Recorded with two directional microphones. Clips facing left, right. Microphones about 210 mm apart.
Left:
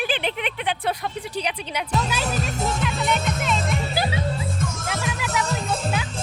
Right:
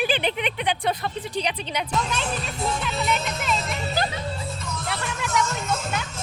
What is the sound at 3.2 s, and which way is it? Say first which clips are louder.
Speech: left 3 dB; 50° left (ahead or behind).